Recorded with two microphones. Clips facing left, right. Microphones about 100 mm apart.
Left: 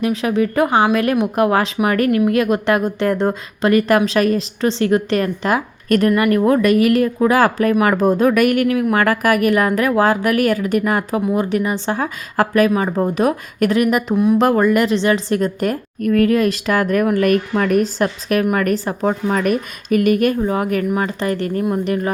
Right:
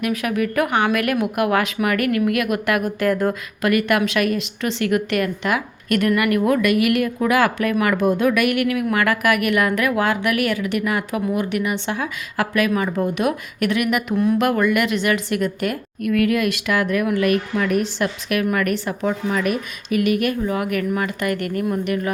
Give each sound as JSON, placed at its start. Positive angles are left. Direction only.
{"t": 0.0, "sound": "speech", "side_deg": 30}